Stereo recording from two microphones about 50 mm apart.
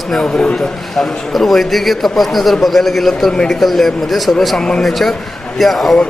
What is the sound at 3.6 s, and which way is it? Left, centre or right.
Speech, centre.